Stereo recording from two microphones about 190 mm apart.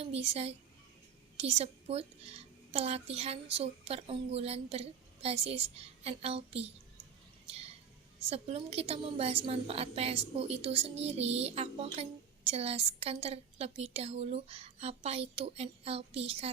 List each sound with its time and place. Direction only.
0.0 s a woman's voice: 35° right (ahead or behind)
7.4 s a sound: 30° right (ahead or behind)
8.3 s a woman's voice: 30° right (ahead or behind)